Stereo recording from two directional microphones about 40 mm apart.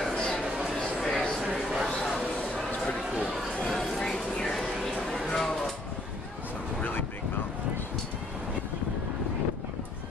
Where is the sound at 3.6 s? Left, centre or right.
Centre.